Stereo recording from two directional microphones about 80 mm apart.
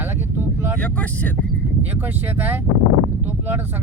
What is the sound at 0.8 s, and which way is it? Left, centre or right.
Speech, centre.